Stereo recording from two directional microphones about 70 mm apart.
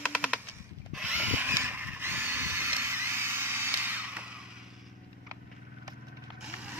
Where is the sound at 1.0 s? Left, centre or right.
Right.